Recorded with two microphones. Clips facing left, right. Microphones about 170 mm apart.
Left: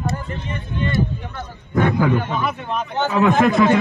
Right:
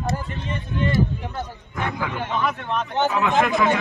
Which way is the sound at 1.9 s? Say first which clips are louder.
Left 6 dB; centre (ahead or behind).